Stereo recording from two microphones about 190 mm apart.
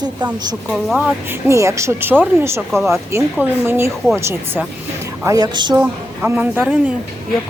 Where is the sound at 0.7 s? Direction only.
Centre (ahead or behind).